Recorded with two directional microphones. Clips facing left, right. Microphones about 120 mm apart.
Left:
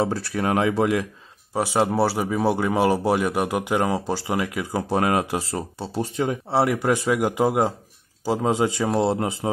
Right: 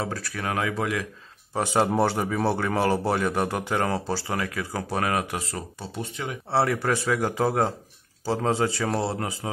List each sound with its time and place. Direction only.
0.0 s speech: 25° left (ahead or behind)
1.5 s speech: 5° left (ahead or behind); by 6.3 s 35° left (ahead or behind)
6.5 s speech: 15° left (ahead or behind)